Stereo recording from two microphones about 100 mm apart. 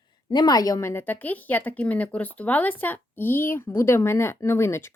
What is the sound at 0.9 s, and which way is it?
A woman's voice, 20° left (ahead or behind).